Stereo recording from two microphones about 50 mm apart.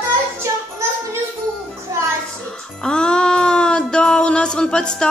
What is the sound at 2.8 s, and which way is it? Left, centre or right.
Music, centre.